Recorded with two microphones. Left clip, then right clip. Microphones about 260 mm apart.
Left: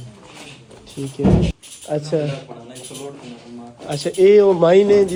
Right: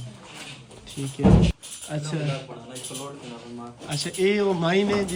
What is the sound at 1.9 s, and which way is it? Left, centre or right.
Speech, centre.